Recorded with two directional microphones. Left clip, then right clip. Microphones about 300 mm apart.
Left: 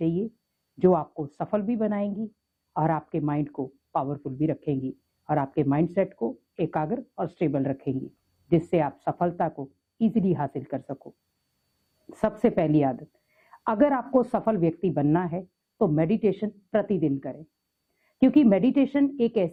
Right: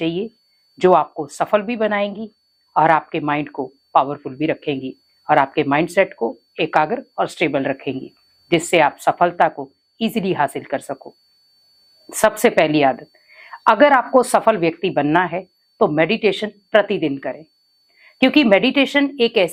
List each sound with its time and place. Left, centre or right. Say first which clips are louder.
0.0 s a woman's voice: right 6 dB; centre
6.1 s speech: right 8 dB; right
6.6 s a woman's voice: right 11 dB; centre